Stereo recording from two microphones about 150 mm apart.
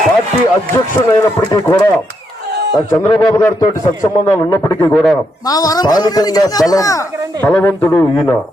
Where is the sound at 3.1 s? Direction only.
25° left (ahead or behind).